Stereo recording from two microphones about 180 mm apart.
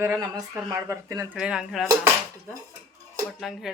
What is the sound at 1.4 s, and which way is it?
Speech, 5° right (ahead or behind).